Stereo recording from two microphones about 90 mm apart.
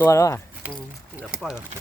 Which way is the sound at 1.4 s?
5° right (ahead or behind).